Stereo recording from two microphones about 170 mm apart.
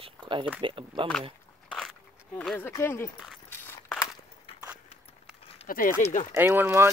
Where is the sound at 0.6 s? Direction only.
30° right (ahead or behind).